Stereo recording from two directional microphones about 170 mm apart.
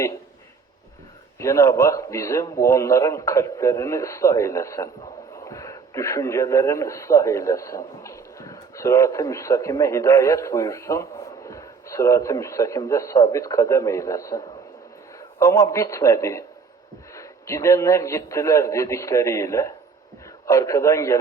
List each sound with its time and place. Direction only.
1.4 s a man's voice: 15° left (ahead or behind)